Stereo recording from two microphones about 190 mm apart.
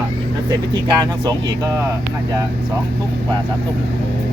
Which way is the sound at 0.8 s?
20° right (ahead or behind).